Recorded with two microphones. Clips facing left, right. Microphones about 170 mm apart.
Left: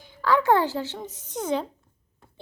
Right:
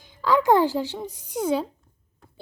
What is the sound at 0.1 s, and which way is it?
A woman's voice, 15° right (ahead or behind).